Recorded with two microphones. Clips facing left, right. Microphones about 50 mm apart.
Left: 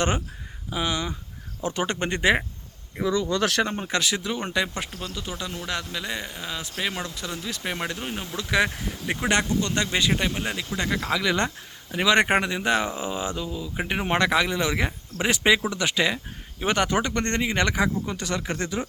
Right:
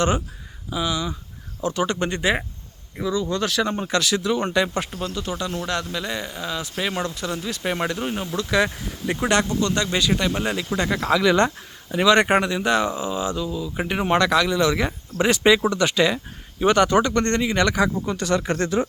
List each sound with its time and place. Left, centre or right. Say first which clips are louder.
0.7 s speech: right 2 dB; left
3.2 s speech: even; left
3.7 s speech: right 4 dB; centre
8.4 s speech: right 2 dB; centre
10.3 s speech: right 5 dB; centre
11.9 s speech: right 3 dB; centre
13.8 s speech: right 3 dB; centre